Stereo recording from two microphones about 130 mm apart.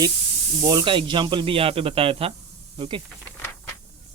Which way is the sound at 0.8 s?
40° right (ahead or behind).